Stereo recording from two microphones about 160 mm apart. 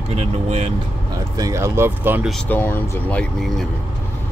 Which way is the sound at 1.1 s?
25° right (ahead or behind).